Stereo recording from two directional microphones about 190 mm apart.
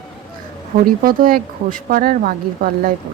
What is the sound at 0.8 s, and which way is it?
Speech, 50° right (ahead or behind).